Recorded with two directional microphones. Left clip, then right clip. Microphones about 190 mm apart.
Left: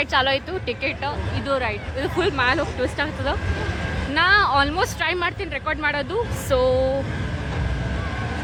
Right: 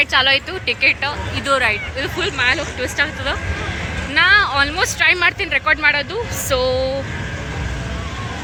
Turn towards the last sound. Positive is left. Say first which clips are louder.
# right 1 dB
turn(degrees=15)  # may be behind; listen again after turning